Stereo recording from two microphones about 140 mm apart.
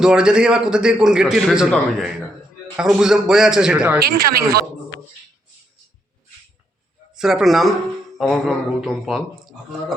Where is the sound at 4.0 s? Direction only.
90° right.